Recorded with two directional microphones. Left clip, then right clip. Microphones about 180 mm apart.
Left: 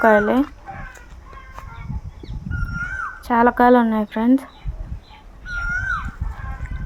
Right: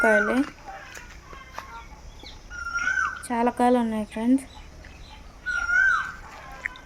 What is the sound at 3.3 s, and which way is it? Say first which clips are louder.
A woman's voice: left 9 dB; 20° left (ahead or behind).